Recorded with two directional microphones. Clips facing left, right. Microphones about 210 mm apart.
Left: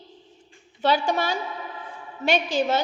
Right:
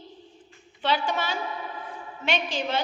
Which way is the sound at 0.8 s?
40° left (ahead or behind).